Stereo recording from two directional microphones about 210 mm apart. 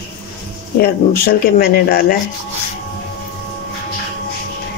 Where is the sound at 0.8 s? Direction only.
45° left (ahead or behind).